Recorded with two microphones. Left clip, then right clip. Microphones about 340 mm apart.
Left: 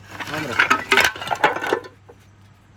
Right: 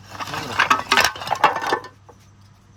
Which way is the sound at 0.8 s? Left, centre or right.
Right.